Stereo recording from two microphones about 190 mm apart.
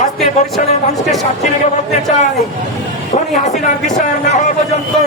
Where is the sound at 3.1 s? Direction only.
35° left (ahead or behind).